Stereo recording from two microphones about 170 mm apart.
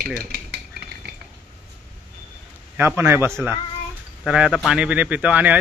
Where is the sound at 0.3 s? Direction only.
70° right (ahead or behind).